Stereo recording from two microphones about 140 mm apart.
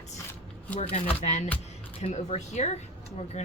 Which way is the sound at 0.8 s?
45° left (ahead or behind).